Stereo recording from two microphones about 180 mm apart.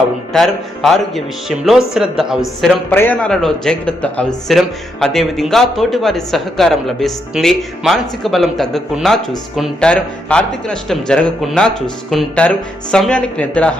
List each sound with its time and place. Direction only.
0.3 s speech: centre (ahead or behind)
2.9 s speech: 10° left (ahead or behind)